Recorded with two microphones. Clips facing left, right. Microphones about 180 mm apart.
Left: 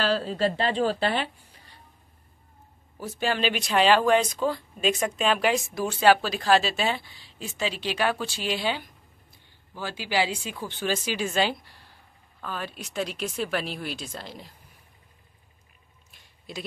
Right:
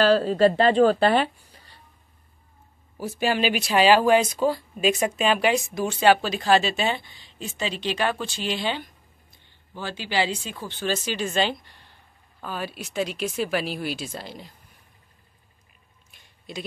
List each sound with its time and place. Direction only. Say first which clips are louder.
0.0 s a woman's voice: right 7 dB; 50° right (ahead or behind)
3.0 s speech: right 3 dB; 10° right (ahead or behind)
12.4 s speech: right 3 dB; 5° right (ahead or behind)
16.1 s a sound: right 2 dB; centre (ahead or behind)